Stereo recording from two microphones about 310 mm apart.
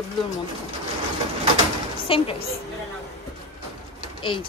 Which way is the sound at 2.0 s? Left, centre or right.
Centre.